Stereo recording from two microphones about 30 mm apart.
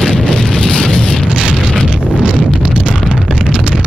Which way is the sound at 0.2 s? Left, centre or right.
Centre.